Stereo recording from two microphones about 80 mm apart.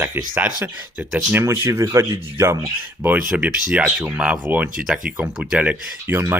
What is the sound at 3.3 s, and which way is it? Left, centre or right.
Speech, centre.